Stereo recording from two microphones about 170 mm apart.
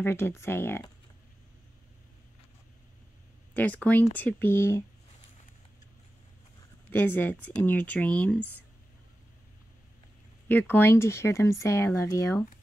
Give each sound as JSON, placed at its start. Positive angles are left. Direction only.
{"t": 0.0, "sound": "speech", "side_deg": 15}
{"t": 3.5, "sound": "speech", "side_deg": 10}
{"t": 6.9, "sound": "speech", "side_deg": 10}
{"t": 10.5, "sound": "speech", "side_deg": 10}